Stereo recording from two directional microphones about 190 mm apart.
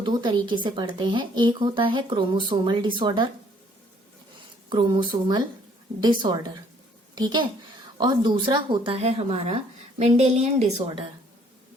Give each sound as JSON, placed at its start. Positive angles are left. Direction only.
{"t": 0.0, "sound": "a woman's voice", "side_deg": -25}
{"t": 4.7, "sound": "a woman's voice", "side_deg": -25}